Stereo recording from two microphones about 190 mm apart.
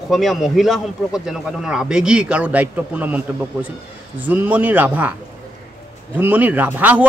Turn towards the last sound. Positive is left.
turn(degrees=-10)  # may be behind; listen again after turning